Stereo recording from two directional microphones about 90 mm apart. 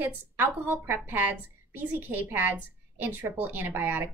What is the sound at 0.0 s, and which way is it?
A woman's voice, 25° right (ahead or behind).